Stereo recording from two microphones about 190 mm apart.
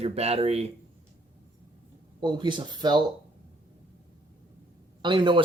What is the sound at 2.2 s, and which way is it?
Speech, 25° right (ahead or behind).